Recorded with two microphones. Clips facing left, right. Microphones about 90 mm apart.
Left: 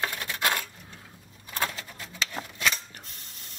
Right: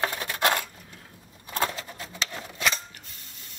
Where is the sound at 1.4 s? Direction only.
25° right (ahead or behind).